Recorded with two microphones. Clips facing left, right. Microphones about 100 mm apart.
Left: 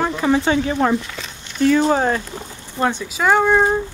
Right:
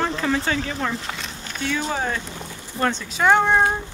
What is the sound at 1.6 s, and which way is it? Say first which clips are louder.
Speech: left 10 dB; 45° left (ahead or behind).